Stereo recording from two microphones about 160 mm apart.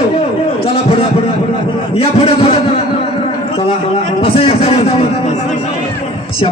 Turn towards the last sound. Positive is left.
turn(degrees=35)  # may be behind; listen again after turning